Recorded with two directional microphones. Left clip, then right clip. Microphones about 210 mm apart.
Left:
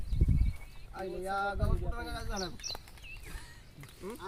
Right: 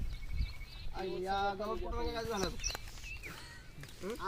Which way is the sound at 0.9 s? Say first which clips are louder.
Left 1 dB; 5° left (ahead or behind).